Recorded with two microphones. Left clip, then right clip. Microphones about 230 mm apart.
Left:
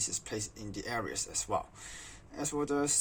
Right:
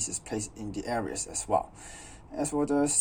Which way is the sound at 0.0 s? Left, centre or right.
Centre.